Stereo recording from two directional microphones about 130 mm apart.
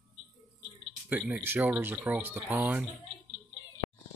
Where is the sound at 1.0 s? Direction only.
10° right (ahead or behind).